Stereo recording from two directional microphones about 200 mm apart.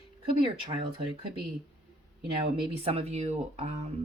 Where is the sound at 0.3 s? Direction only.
25° right (ahead or behind).